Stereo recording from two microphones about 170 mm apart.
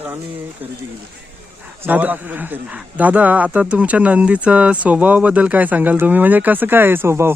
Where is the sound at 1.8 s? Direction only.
10° right (ahead or behind).